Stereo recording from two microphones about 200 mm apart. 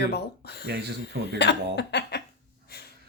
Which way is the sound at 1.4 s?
55° left (ahead or behind).